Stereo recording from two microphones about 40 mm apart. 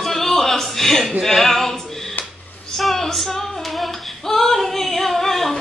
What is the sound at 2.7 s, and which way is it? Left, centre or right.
Female singing, centre.